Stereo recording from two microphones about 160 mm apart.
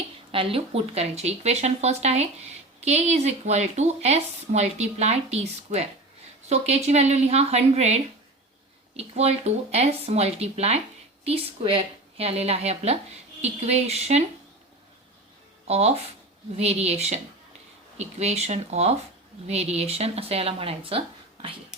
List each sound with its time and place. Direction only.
0.3 s a woman's voice: 35° right (ahead or behind)
15.6 s a woman's voice: 40° right (ahead or behind)